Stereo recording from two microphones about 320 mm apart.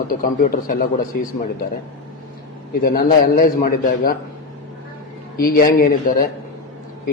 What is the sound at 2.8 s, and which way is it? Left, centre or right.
A man's voice, left.